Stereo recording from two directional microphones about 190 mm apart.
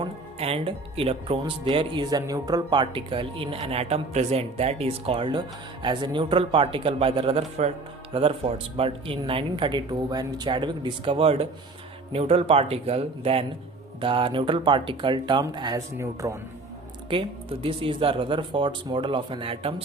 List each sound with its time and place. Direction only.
0.0 s speech: 30° right (ahead or behind)
17.1 s speech: 30° right (ahead or behind)